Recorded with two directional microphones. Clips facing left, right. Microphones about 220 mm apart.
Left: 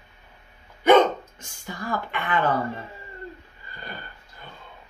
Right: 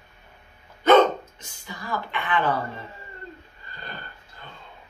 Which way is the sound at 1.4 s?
50° left (ahead or behind).